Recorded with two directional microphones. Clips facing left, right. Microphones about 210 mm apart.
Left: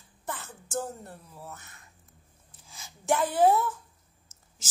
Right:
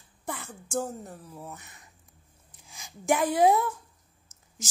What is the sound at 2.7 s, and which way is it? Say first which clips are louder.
Speech: right 1 dB; 15° right (ahead or behind).